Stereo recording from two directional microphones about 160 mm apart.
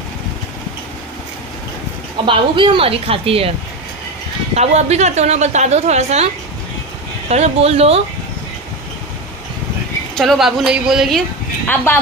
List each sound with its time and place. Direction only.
2.2 s speech: 30° right (ahead or behind)
4.6 s a woman's voice: 45° right (ahead or behind)
10.1 s speech: centre (ahead or behind)
11.6 s speech: 10° left (ahead or behind)